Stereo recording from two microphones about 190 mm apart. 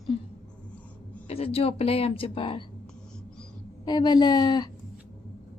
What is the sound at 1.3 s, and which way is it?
A woman's voice, 30° left (ahead or behind).